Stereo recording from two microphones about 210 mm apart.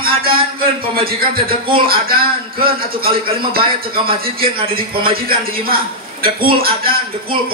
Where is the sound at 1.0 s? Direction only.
45° right (ahead or behind).